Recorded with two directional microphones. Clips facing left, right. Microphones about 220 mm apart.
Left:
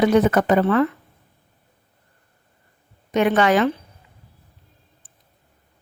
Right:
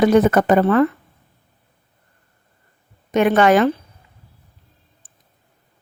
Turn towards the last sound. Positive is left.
turn(degrees=-45)  # may be behind; listen again after turning